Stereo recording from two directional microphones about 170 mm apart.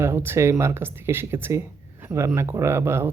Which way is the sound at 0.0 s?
15° right (ahead or behind).